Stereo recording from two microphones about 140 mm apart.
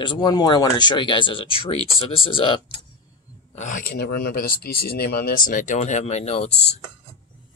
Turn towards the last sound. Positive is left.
turn(degrees=50)  # may be behind; listen again after turning